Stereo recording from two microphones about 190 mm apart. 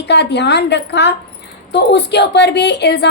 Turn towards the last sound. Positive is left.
turn(degrees=60)  # may be behind; listen again after turning